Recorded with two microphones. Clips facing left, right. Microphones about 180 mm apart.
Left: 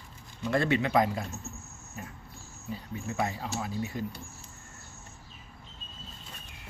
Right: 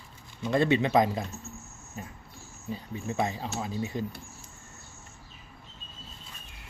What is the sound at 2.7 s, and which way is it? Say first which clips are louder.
Speech: right 2 dB; 20° right (ahead or behind).